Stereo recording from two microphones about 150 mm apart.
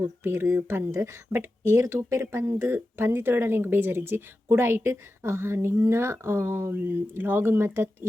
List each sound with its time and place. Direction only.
0.0 s speech: 15° right (ahead or behind)